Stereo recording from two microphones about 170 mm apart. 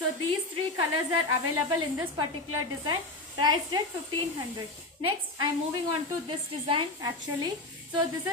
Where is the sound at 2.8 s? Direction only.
25° right (ahead or behind).